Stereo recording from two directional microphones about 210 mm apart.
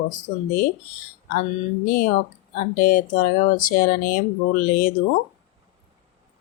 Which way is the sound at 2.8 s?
40° left (ahead or behind).